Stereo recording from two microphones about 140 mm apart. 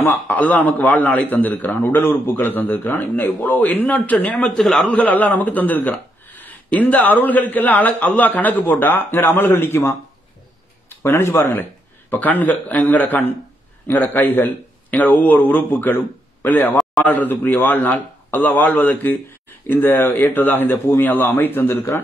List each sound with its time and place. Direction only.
0.0 s a man's voice: 15° left (ahead or behind)
11.0 s a man's voice: 15° left (ahead or behind)